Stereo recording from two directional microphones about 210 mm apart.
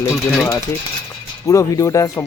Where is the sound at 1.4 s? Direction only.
15° left (ahead or behind).